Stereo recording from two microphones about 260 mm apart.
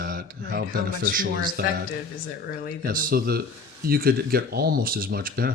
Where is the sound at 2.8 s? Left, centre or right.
Right.